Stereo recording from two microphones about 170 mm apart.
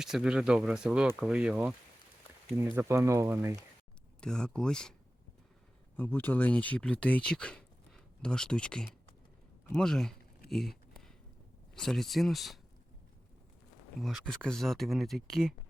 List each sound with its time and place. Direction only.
0.0 s speech: 5° right (ahead or behind)
4.2 s speech: 5° left (ahead or behind)
6.0 s speech: 10° left (ahead or behind)
10.5 s a sound: centre (ahead or behind)
11.7 s speech: centre (ahead or behind)
14.0 s speech: centre (ahead or behind)